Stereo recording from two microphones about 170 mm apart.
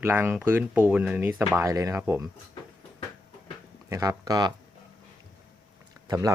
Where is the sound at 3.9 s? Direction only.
20° right (ahead or behind).